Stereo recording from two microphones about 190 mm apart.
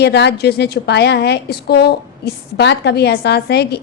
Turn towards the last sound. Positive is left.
turn(degrees=60)  # may be behind; listen again after turning